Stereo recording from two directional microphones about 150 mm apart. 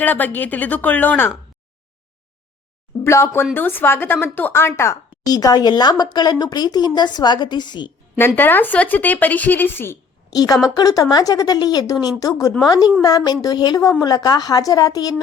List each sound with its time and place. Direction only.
0.0 s speech: 10° left (ahead or behind)
3.0 s a woman's voice: 15° left (ahead or behind)
8.4 s speech: 15° left (ahead or behind)
10.2 s a woman's voice: 25° left (ahead or behind)